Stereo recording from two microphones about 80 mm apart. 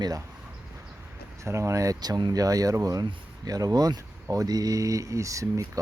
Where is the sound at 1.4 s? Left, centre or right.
Right.